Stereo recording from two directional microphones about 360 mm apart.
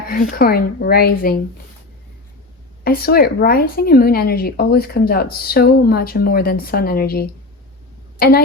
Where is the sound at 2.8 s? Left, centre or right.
Left.